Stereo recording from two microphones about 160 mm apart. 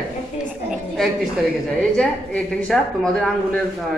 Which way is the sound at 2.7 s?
5° left (ahead or behind).